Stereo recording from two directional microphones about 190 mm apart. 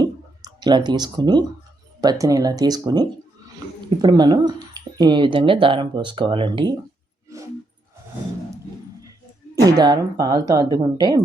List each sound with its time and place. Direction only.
0.0 s a sound: 20° right (ahead or behind)
2.0 s speech: 20° right (ahead or behind)
9.6 s speech: 20° right (ahead or behind)